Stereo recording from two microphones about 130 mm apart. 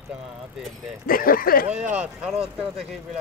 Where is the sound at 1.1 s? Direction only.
90° left.